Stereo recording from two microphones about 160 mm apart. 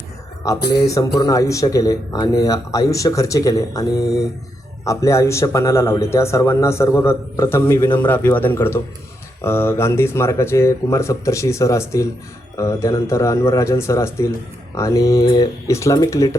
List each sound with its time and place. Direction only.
0.6 s speech: 90° left
0.9 s a man's voice: 20° left (ahead or behind)